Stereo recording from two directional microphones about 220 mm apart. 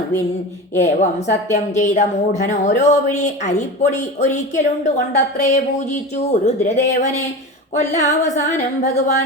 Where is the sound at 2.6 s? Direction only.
30° left (ahead or behind).